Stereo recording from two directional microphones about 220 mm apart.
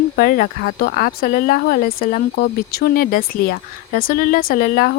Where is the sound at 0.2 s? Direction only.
45° left (ahead or behind).